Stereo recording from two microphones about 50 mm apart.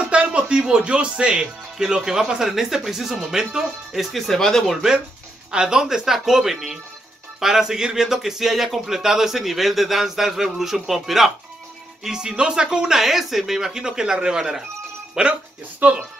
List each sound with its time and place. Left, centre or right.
0.0 s speech: right; by 4.7 s centre
5.5 s speech: centre
15.8 s speech: right